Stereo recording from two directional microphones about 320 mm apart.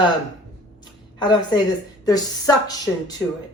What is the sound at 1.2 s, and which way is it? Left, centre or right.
A woman's voice, centre.